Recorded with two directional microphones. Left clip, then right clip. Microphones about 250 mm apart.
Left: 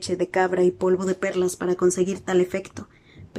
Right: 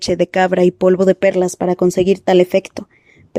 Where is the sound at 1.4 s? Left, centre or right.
Right.